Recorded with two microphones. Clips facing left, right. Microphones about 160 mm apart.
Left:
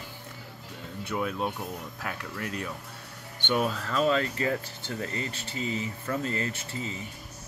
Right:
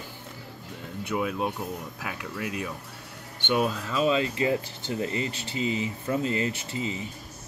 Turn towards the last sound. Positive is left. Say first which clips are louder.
# right 4 dB
turn(degrees=-20)  # may be behind; listen again after turning